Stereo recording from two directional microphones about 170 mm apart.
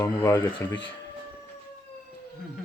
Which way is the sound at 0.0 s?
15° left (ahead or behind).